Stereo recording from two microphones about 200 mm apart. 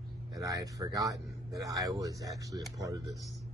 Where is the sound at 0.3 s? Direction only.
15° right (ahead or behind).